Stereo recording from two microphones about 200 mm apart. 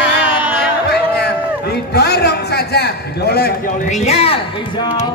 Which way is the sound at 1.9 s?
55° left (ahead or behind).